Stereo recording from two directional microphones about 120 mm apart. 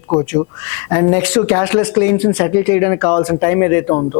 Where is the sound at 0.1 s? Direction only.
30° left (ahead or behind).